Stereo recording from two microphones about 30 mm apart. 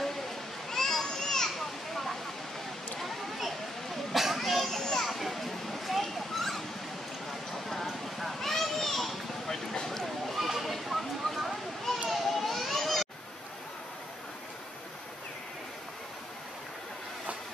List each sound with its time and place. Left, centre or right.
0.7 s children playing: centre
4.1 s a sound: centre
4.4 s children playing: centre
4.6 s children playing: centre
5.0 s children playing: centre
7.5 s a sound: centre
12.1 s children playing: centre